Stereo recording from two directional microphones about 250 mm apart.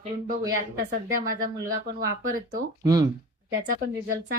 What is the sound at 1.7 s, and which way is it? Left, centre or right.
Speech, right.